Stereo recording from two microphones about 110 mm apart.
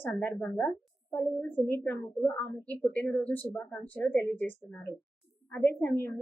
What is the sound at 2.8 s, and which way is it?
A woman's voice, 10° left (ahead or behind).